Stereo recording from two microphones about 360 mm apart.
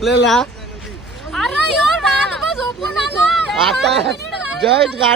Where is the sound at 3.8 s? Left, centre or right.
Right.